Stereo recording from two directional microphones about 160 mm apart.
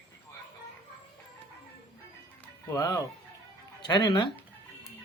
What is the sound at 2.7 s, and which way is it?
Speech, 20° left (ahead or behind).